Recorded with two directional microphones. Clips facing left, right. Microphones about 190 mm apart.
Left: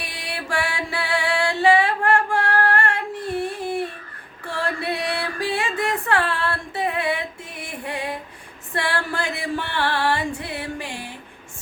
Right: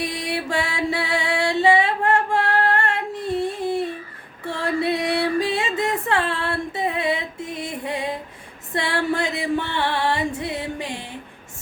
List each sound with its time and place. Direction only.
0.0 s music: 20° right (ahead or behind)
4.4 s female singing: 20° right (ahead or behind)
8.7 s music: 20° right (ahead or behind)